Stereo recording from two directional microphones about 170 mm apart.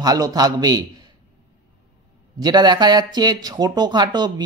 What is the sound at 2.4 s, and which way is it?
Speech, 25° right (ahead or behind).